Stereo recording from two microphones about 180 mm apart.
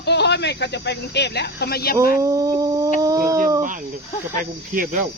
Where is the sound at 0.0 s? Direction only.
70° left (ahead or behind).